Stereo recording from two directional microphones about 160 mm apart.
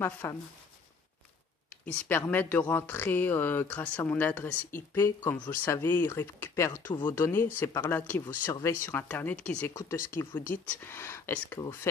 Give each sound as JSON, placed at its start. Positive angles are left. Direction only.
{"t": 0.0, "sound": "speech", "side_deg": 10}
{"t": 1.9, "sound": "speech", "side_deg": 10}